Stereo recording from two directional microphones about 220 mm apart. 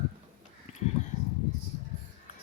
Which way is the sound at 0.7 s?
30° left (ahead or behind).